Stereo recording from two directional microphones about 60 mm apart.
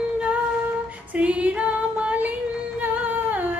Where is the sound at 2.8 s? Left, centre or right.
Right.